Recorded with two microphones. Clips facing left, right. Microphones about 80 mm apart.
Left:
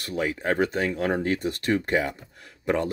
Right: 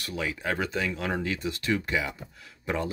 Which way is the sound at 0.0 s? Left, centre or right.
Left.